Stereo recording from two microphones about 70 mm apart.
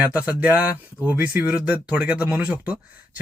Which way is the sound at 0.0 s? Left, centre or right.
Right.